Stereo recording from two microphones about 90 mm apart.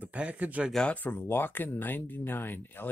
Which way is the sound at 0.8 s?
20° left (ahead or behind).